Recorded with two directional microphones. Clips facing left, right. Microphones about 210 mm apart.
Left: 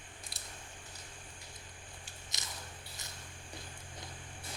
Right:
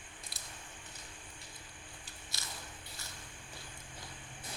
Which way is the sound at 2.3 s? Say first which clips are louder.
Even; 20° left (ahead or behind).